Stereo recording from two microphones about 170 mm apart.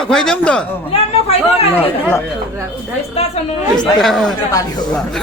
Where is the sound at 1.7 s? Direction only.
10° left (ahead or behind).